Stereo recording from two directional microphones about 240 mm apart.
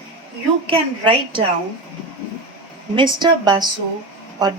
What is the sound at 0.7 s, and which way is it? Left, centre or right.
Speech, right.